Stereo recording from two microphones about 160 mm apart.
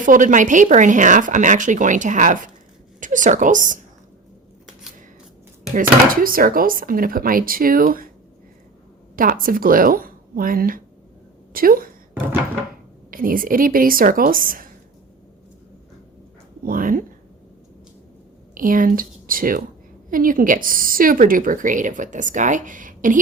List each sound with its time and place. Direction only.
0.0 s a woman's voice: 55° right (ahead or behind)
5.7 s a woman's voice: 60° right (ahead or behind)
9.1 s a woman's voice: 60° right (ahead or behind)
13.1 s a woman's voice: 60° right (ahead or behind)
16.6 s speech: 60° right (ahead or behind)
18.5 s a woman's voice: 60° right (ahead or behind)